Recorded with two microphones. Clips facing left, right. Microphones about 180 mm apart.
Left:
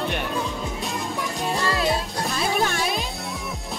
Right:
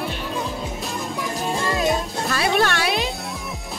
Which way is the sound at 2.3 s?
75° right (ahead or behind).